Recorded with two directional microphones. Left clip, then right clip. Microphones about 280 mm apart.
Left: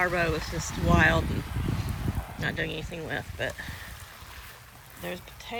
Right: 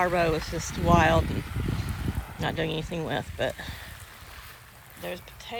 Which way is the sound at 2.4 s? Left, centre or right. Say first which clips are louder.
Right 2 dB; centre.